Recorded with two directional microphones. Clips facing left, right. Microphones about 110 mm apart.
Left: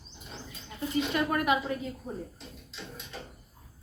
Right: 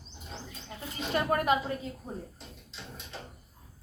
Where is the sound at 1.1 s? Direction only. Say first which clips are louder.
Right 3 dB; 35° right (ahead or behind).